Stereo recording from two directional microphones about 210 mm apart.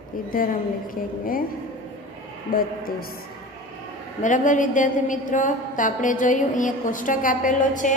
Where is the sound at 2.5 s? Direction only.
45° left (ahead or behind).